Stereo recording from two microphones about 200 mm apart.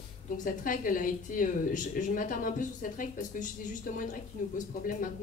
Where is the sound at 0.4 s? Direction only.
40° left (ahead or behind).